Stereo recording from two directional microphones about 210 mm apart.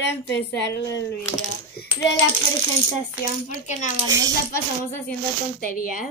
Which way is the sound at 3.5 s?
35° left (ahead or behind).